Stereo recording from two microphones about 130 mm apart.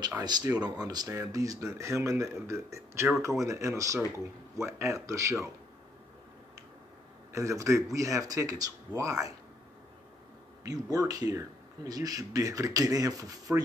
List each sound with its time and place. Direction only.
0.2 s speech: 30° right (ahead or behind)
7.3 s speech: 25° right (ahead or behind)
10.6 s speech: 25° right (ahead or behind)